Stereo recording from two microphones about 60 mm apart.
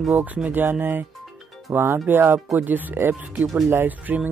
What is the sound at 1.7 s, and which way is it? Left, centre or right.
Speech, right.